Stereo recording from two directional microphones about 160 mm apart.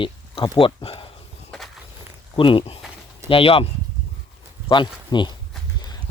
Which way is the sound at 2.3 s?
35° left (ahead or behind).